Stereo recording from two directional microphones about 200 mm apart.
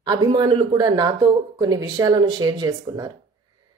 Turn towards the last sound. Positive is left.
turn(degrees=-20)  # may be behind; listen again after turning